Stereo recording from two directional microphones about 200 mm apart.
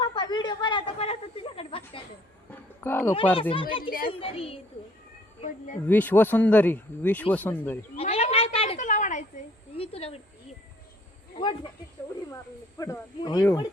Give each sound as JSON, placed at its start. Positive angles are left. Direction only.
{"t": 0.0, "sound": "a sound", "side_deg": 25}
{"t": 2.5, "sound": "a sound", "side_deg": 10}
{"t": 3.5, "sound": "a child's voice", "side_deg": 25}
{"t": 3.8, "sound": "a child's voice", "side_deg": 45}
{"t": 4.1, "sound": "a child's voice", "side_deg": 25}
{"t": 5.4, "sound": "speech", "side_deg": 40}
{"t": 5.9, "sound": "speech", "side_deg": 10}
{"t": 7.9, "sound": "cat", "side_deg": 30}
{"t": 9.7, "sound": "a sound", "side_deg": 30}
{"t": 12.8, "sound": "speech", "side_deg": 15}